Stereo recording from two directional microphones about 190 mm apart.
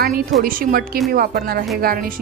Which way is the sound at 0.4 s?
50° right (ahead or behind).